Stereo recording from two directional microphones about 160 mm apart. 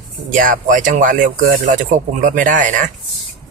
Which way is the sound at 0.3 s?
55° right (ahead or behind).